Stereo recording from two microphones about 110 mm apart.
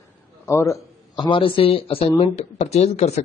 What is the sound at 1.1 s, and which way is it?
Speech, 45° left (ahead or behind).